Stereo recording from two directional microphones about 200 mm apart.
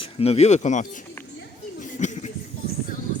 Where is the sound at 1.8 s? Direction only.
35° left (ahead or behind).